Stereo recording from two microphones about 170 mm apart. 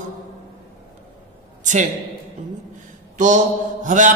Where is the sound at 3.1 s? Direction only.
50° right (ahead or behind).